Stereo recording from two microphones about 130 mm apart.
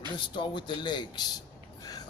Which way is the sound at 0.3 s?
35° left (ahead or behind).